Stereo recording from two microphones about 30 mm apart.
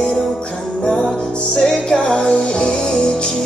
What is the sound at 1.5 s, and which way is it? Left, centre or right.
Music, centre.